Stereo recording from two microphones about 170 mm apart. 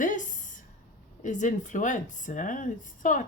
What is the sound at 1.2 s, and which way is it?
A woman's voice, 45° left (ahead or behind).